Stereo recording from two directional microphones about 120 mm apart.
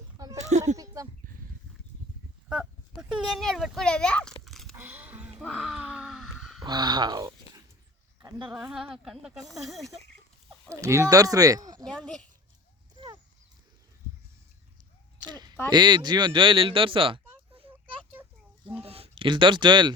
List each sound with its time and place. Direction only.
0.3 s a sound: 70° right (ahead or behind)
3.0 s speech: centre (ahead or behind)
4.7 s music: 15° right (ahead or behind)
5.5 s groan: centre (ahead or behind)
6.7 s speech: 35° right (ahead or behind)
8.5 s speech: 5° right (ahead or behind)
10.7 s speech: 25° right (ahead or behind)
11.9 s speech: 5° left (ahead or behind)
15.2 s a sound: 35° right (ahead or behind)
15.7 s speech: 35° right (ahead or behind)
18.1 s a sound: 15° right (ahead or behind)
18.9 s a sound: 55° right (ahead or behind)
19.3 s speech: 40° right (ahead or behind)